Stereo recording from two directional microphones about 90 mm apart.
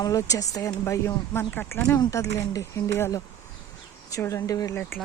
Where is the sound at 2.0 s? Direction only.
40° left (ahead or behind).